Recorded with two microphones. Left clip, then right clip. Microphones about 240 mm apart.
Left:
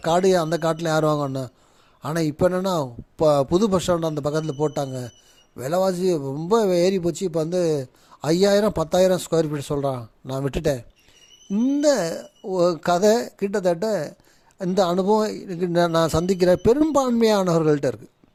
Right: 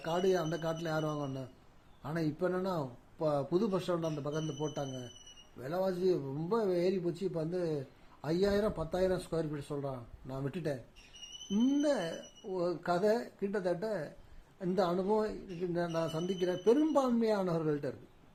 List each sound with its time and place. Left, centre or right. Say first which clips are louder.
0.0 s a man's voice: left 13 dB; left